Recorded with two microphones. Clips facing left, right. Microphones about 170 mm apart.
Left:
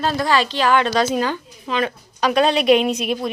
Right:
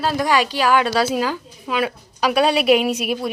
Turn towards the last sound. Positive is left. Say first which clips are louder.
# even
turn(degrees=-5)  # may be behind; listen again after turning